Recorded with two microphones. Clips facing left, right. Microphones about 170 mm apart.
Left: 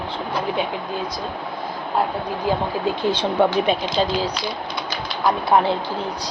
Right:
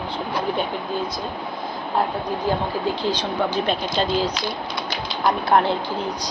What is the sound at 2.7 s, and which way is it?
Speech, 20° left (ahead or behind).